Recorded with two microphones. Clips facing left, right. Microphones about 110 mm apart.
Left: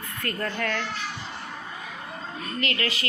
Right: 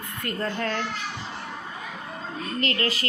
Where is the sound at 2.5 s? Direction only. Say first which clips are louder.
Right 2 dB; 35° right (ahead or behind).